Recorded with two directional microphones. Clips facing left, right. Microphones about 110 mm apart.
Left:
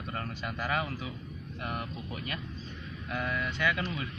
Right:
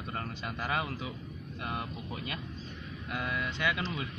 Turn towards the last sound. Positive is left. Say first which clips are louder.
# left 1 dB
turn(degrees=-20)  # may be behind; listen again after turning